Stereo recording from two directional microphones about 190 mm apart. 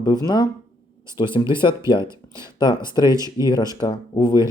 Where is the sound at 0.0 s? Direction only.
20° left (ahead or behind).